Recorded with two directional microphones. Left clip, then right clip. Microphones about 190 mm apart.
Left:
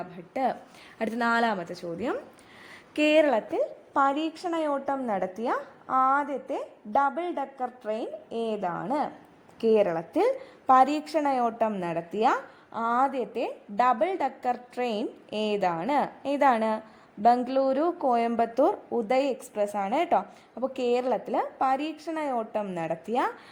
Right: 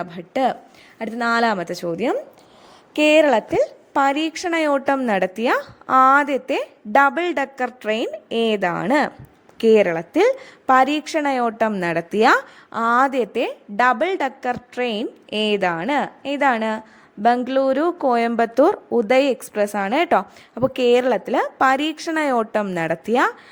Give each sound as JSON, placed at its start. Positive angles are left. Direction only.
{"t": 0.0, "sound": "a woman's voice", "side_deg": -25}
{"t": 0.9, "sound": "speech", "side_deg": 0}
{"t": 1.2, "sound": "a woman's voice", "side_deg": -15}
{"t": 1.5, "sound": "a woman's voice", "side_deg": -30}
{"t": 2.9, "sound": "a woman's voice", "side_deg": -15}
{"t": 4.4, "sound": "a woman's voice", "side_deg": -30}
{"t": 9.6, "sound": "a woman's voice", "side_deg": -20}